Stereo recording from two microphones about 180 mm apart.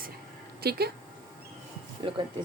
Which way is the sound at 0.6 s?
60° right (ahead or behind).